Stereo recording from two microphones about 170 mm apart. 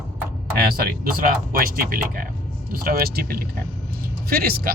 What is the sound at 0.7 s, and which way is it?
Speech, 60° right (ahead or behind).